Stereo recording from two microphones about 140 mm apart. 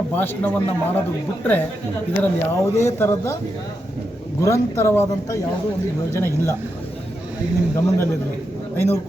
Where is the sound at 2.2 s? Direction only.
20° left (ahead or behind).